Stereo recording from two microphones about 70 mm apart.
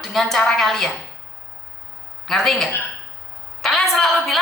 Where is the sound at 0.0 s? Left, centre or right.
Centre.